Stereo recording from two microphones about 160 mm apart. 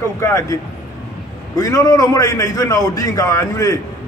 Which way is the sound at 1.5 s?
20° left (ahead or behind).